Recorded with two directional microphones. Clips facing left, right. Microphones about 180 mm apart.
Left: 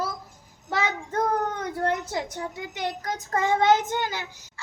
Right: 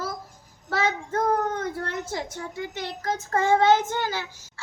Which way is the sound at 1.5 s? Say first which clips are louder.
Left 3 dB; 15° left (ahead or behind).